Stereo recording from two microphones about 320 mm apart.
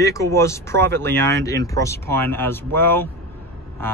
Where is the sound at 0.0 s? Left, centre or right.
Centre.